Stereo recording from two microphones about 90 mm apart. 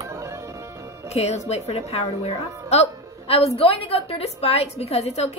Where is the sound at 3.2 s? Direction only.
90° left.